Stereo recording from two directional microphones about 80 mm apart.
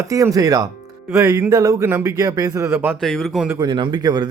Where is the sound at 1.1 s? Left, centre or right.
Right.